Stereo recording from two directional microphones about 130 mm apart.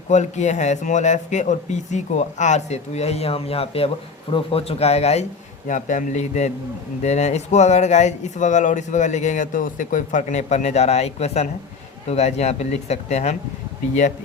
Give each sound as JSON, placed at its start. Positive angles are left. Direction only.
{"t": 0.1, "sound": "speech", "side_deg": 65}
{"t": 5.6, "sound": "a man's voice", "side_deg": 75}